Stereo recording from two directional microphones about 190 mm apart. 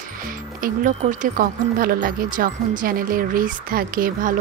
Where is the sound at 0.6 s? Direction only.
45° right (ahead or behind).